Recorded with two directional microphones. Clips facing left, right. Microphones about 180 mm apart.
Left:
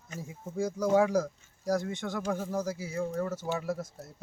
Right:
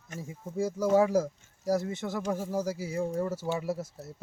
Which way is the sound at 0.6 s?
5° right (ahead or behind).